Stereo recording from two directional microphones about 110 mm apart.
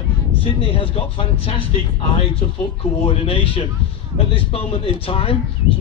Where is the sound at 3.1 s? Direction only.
55° left (ahead or behind).